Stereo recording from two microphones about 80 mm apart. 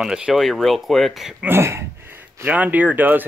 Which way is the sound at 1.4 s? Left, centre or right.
Right.